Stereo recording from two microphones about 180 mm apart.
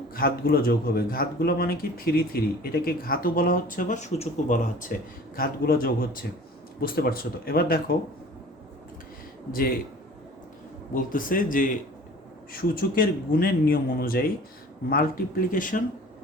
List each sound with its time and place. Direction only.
0.1 s a man's voice: 55° left (ahead or behind)
9.5 s a man's voice: 55° left (ahead or behind)
10.9 s a man's voice: 50° left (ahead or behind)